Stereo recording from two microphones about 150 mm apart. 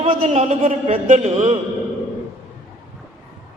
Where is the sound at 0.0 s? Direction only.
40° right (ahead or behind).